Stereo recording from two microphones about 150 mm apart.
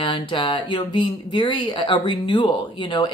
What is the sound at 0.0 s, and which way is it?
Speech, 30° left (ahead or behind).